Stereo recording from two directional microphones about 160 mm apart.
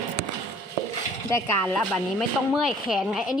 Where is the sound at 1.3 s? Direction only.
15° left (ahead or behind).